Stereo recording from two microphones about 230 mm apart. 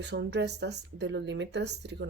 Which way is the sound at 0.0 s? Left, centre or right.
Right.